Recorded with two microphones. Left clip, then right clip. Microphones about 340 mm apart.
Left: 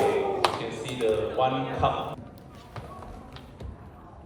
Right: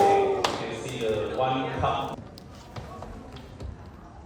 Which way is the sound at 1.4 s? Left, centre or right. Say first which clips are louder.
Left 1 dB; left.